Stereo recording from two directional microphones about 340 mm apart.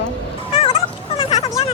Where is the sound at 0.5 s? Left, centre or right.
Centre.